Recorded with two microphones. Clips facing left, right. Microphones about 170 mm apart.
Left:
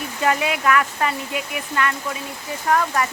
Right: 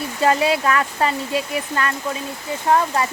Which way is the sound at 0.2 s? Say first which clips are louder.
Right 4 dB; 30° right (ahead or behind).